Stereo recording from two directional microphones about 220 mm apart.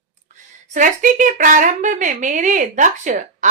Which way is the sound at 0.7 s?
35° right (ahead or behind).